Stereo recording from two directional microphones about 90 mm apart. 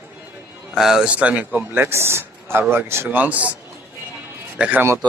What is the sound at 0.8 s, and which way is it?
A man's voice, 5° right (ahead or behind).